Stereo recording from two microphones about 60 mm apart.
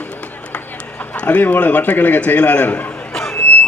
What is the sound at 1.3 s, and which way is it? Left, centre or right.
A man's voice, left.